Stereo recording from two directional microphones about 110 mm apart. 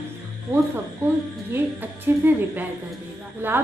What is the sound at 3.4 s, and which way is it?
Speech, 20° right (ahead or behind).